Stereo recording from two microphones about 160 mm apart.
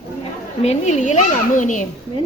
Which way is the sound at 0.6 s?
45° left (ahead or behind).